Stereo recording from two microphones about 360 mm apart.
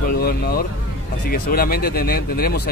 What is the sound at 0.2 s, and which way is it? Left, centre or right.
Speech, left.